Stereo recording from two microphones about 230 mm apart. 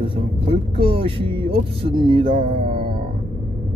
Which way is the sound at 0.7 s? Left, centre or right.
Right.